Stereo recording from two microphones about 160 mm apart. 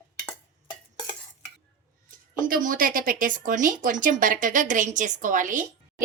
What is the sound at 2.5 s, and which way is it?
A woman's voice, 60° right (ahead or behind).